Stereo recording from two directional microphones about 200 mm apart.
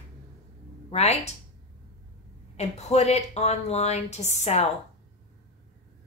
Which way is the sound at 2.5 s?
35° left (ahead or behind).